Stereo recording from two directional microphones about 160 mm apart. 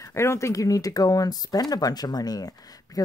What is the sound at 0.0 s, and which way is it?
Speech, 15° left (ahead or behind).